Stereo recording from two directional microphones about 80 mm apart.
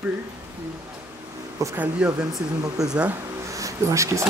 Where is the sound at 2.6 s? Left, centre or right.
Right.